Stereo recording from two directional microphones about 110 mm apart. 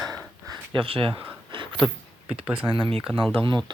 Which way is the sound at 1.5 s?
50° right (ahead or behind).